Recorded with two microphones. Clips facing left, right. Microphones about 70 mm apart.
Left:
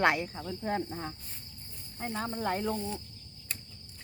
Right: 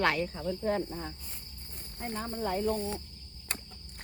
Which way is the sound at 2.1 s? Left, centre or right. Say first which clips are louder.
Left 1 dB; left.